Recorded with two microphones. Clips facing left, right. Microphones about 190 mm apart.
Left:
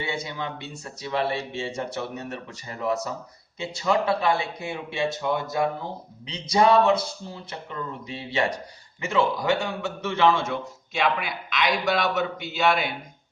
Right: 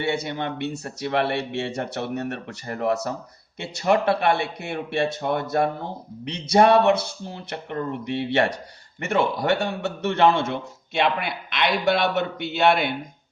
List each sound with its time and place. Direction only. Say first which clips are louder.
0.0 s a man's voice: right 5 dB; 65° right (ahead or behind)